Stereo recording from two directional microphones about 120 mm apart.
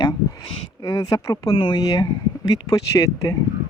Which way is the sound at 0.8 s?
30° left (ahead or behind).